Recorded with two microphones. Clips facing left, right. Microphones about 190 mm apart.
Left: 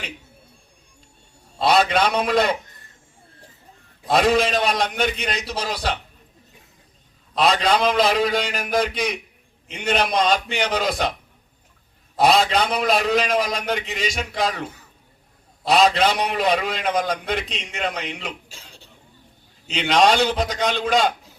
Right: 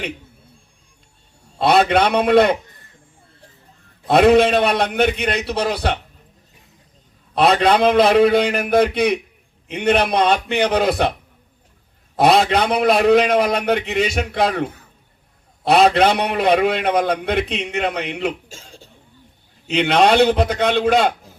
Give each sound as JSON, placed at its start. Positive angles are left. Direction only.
{"t": 1.5, "sound": "a man's voice", "side_deg": -60}
{"t": 4.0, "sound": "a man's voice", "side_deg": -60}
{"t": 7.3, "sound": "a man's voice", "side_deg": -60}
{"t": 12.1, "sound": "a man's voice", "side_deg": -60}
{"t": 19.6, "sound": "a man's voice", "side_deg": -60}